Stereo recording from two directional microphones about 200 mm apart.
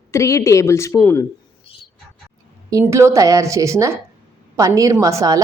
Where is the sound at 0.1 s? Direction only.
15° left (ahead or behind).